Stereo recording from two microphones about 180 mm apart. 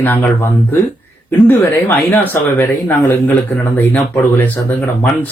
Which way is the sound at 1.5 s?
10° left (ahead or behind).